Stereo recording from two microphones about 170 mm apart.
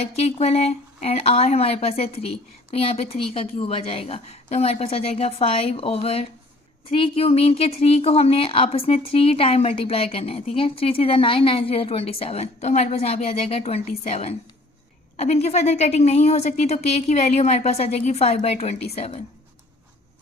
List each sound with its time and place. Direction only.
0.0 s a woman's voice: 40° left (ahead or behind)